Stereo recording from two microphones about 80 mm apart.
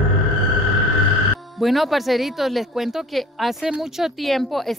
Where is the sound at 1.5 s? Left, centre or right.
Centre.